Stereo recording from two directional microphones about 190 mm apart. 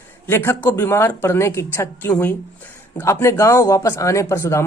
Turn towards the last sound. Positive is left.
turn(degrees=15)  # may be behind; listen again after turning